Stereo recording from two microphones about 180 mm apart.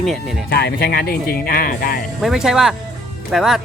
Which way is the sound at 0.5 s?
60° left (ahead or behind).